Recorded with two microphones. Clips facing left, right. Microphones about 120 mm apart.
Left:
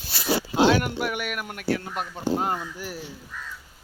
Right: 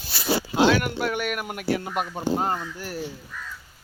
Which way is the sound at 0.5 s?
25° left (ahead or behind).